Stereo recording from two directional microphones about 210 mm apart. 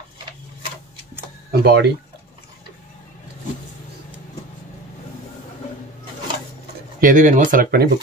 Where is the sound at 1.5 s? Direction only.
50° right (ahead or behind).